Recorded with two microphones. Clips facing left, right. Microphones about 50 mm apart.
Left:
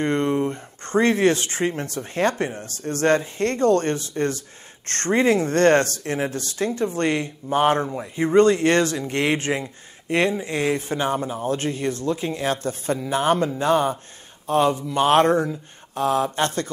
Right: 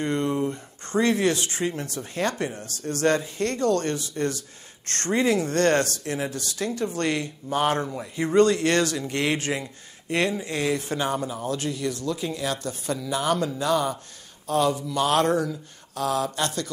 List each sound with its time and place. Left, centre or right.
0.0 s speech: left